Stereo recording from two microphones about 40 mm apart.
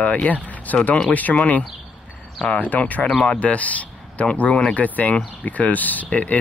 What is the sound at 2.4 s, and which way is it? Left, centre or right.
Speech, centre.